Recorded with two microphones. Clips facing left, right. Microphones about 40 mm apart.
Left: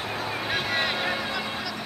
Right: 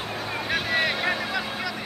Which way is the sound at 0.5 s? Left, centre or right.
Centre.